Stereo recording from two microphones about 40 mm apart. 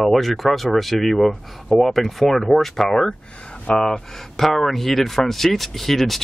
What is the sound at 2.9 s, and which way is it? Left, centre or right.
Speech, centre.